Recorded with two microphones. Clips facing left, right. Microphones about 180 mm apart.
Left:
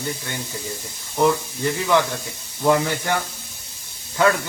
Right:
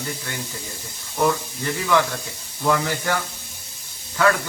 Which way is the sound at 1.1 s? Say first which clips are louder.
Left 2 dB; 20° left (ahead or behind).